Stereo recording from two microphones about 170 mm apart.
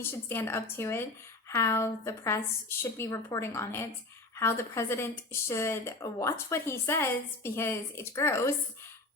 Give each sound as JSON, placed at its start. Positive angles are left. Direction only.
{"t": 0.1, "sound": "speech", "side_deg": 15}